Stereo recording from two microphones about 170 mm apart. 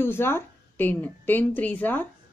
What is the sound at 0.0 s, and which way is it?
A woman's voice, 15° left (ahead or behind).